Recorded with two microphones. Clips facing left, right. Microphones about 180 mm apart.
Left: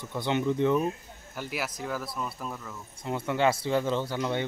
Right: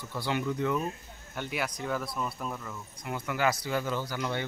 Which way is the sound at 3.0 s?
25° left (ahead or behind).